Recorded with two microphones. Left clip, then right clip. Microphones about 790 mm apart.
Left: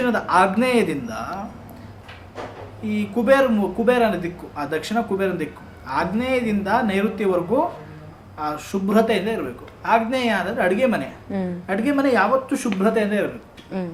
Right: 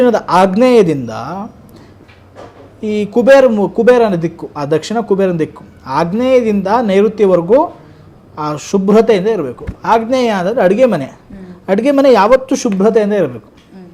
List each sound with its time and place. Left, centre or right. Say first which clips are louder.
0.0 s speech: right 8 dB; right
2.8 s a man's voice: right 11 dB; right
8.4 s a man's voice: right 9 dB; right